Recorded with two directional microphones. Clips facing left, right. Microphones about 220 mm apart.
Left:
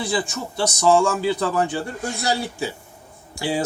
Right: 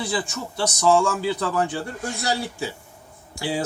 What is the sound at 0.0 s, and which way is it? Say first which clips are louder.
Speech: left 2 dB; 25° left (ahead or behind).